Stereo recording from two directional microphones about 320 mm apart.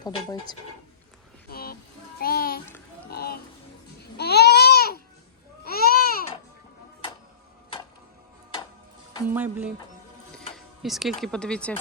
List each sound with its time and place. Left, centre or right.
0.0 s speech: centre
1.5 s child singing: left
3.1 s a sound: left
4.0 s babbling: left
9.3 s speech: centre